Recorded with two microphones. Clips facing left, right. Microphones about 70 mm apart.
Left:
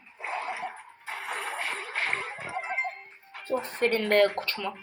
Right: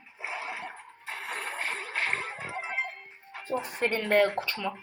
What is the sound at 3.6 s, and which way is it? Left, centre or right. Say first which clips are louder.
Speech: left 4 dB; centre.